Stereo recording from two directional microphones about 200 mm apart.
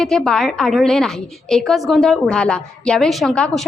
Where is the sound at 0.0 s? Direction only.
Centre (ahead or behind).